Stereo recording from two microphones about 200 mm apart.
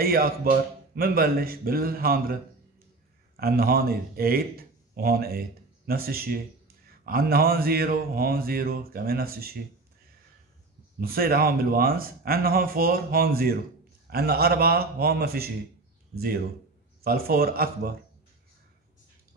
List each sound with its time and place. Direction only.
0.0 s speech: 50° right (ahead or behind)
3.3 s a man's voice: 50° right (ahead or behind)
11.0 s speech: 45° right (ahead or behind)
17.0 s speech: 50° right (ahead or behind)